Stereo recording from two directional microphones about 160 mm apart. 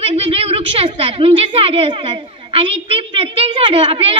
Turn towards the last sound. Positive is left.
turn(degrees=-35)  # may be behind; listen again after turning